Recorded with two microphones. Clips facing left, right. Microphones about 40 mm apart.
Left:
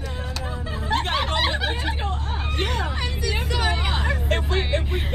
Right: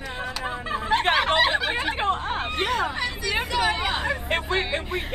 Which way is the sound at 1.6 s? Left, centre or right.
Right.